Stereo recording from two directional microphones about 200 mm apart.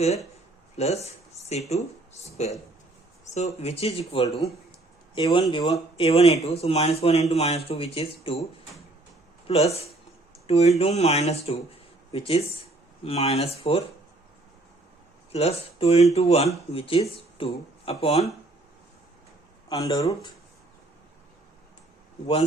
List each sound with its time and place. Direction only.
0.8 s speech: 30° left (ahead or behind)
5.1 s speech: 25° left (ahead or behind)
9.5 s speech: 30° left (ahead or behind)
15.3 s speech: 30° left (ahead or behind)
19.7 s speech: 15° left (ahead or behind)